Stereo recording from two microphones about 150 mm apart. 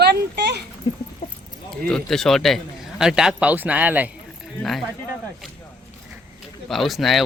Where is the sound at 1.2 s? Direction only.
45° left (ahead or behind).